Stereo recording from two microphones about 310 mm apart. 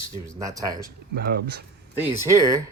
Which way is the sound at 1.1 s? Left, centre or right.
Right.